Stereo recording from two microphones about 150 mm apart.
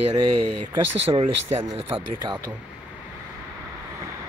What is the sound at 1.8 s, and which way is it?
Speech, 35° right (ahead or behind).